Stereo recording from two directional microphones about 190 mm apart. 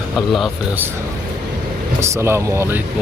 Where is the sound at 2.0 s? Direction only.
15° right (ahead or behind).